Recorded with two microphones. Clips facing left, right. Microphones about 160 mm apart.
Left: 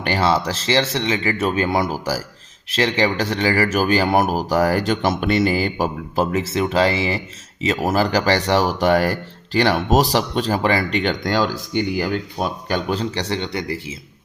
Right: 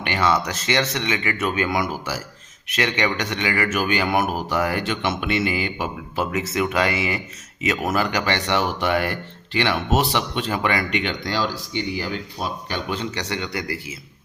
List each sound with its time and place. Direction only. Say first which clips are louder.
0.0 s speech: left 2 dB; 35° left (ahead or behind)